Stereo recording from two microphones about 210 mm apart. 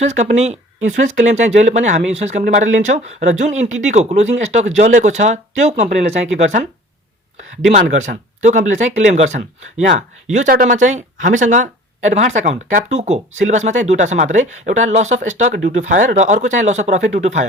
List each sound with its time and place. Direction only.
0.0 s speech: 35° right (ahead or behind)
7.7 s speech: 35° right (ahead or behind)